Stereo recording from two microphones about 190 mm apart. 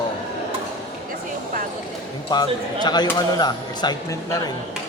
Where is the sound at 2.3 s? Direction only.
20° left (ahead or behind).